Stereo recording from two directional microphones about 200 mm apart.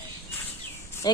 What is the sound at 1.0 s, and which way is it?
Speech, 20° left (ahead or behind).